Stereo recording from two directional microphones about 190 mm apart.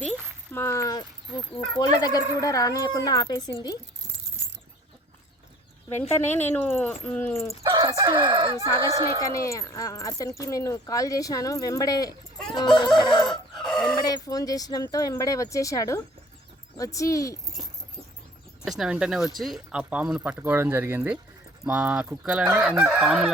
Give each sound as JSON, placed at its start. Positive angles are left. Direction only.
{"t": 0.5, "sound": "a sound", "side_deg": 15}
{"t": 1.7, "sound": "speech", "side_deg": 20}
{"t": 5.9, "sound": "speech", "side_deg": 10}
{"t": 7.7, "sound": "chicken", "side_deg": -20}
{"t": 8.9, "sound": "speech", "side_deg": -20}
{"t": 9.2, "sound": "speech", "side_deg": 15}
{"t": 13.2, "sound": "chicken", "side_deg": 0}
{"t": 13.8, "sound": "speech", "side_deg": 20}
{"t": 18.8, "sound": "fowl", "side_deg": -5}
{"t": 19.4, "sound": "speech", "side_deg": 0}
{"t": 21.6, "sound": "fowl", "side_deg": -5}